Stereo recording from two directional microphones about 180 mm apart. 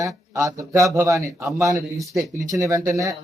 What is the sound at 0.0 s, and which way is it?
A man's voice, 20° right (ahead or behind).